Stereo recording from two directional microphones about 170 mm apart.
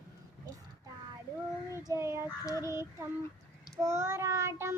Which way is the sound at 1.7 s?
15° right (ahead or behind).